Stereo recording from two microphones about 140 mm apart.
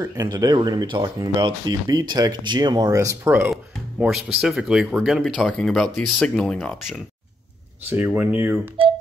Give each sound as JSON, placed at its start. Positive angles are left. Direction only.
{"t": 0.0, "sound": "speech", "side_deg": -25}
{"t": 4.0, "sound": "speech", "side_deg": 0}
{"t": 7.9, "sound": "speech", "side_deg": -10}